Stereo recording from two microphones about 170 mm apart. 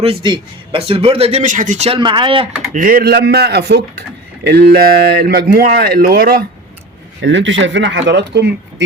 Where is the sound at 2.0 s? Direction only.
30° right (ahead or behind).